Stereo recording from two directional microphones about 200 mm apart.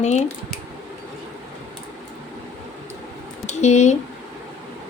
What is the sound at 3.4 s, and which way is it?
Speech, 35° left (ahead or behind).